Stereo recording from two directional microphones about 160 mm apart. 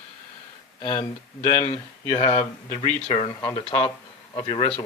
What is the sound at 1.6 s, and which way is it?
Speech, 40° left (ahead or behind).